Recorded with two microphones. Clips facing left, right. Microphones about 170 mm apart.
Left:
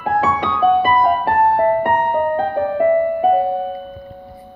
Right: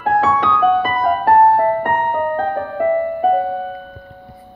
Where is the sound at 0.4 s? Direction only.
25° left (ahead or behind).